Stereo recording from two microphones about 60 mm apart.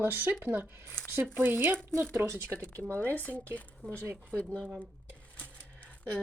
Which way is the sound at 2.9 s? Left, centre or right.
Right.